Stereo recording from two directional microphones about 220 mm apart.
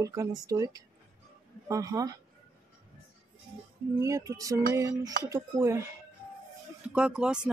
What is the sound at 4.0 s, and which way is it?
Speech, 15° right (ahead or behind).